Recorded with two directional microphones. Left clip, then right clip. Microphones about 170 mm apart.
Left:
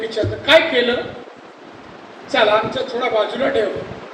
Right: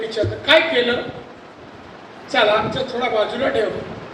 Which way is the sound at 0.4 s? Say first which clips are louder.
Left 2 dB; 25° right (ahead or behind).